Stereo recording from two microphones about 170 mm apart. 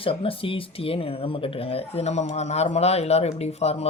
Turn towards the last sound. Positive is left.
turn(degrees=40)  # may be behind; listen again after turning